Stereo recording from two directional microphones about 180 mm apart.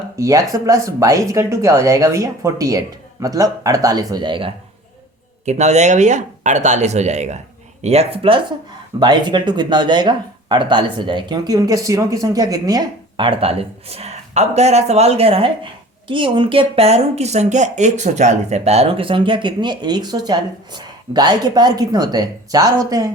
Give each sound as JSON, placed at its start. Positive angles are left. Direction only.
{"t": 0.2, "sound": "speech", "side_deg": -20}
{"t": 5.5, "sound": "speech", "side_deg": -40}